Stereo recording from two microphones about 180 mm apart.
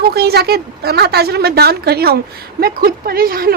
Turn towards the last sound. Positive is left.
turn(degrees=-55)  # may be behind; listen again after turning